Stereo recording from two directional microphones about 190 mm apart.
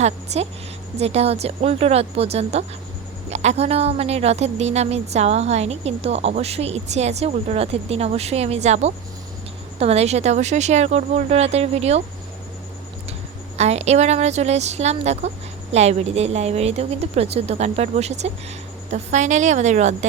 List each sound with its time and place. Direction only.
0.3 s a woman's voice: 35° right (ahead or behind)
13.6 s a woman's voice: 35° right (ahead or behind)